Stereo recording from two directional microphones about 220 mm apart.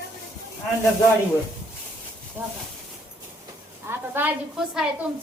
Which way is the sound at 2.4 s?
10° right (ahead or behind).